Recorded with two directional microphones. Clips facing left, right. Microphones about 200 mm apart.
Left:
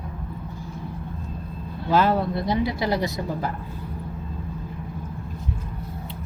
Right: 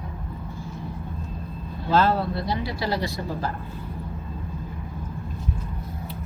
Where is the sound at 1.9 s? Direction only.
15° left (ahead or behind).